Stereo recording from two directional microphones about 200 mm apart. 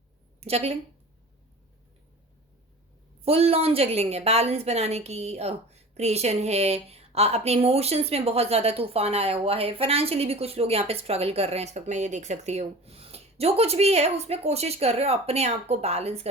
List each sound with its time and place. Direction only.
0.3 s a woman's voice: 30° right (ahead or behind)
3.2 s a woman's voice: 30° right (ahead or behind)